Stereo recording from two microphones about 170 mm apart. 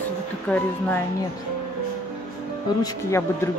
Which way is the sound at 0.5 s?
5° left (ahead or behind).